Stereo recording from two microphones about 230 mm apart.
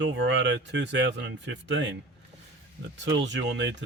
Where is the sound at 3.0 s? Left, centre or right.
Right.